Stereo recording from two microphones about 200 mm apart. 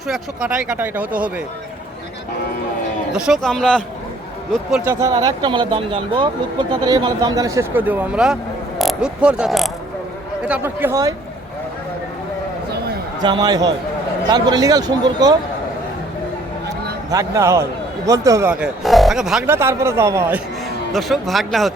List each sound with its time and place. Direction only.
0.1 s speech: 5° right (ahead or behind)
3.1 s speech: 5° right (ahead or behind)
4.9 s a man's voice: 15° right (ahead or behind)
13.2 s speech: 20° right (ahead or behind)
17.1 s a man's voice: 15° right (ahead or behind)
18.5 s speech: centre (ahead or behind)
20.9 s speech: centre (ahead or behind)